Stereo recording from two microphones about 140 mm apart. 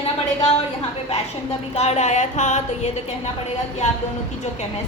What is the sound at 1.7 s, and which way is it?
Speech, 50° left (ahead or behind).